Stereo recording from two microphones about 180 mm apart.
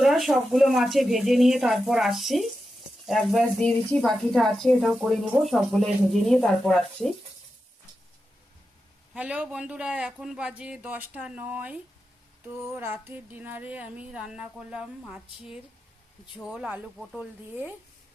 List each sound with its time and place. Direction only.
0.0 s speech: centre (ahead or behind)
9.1 s a man's voice: 5° right (ahead or behind)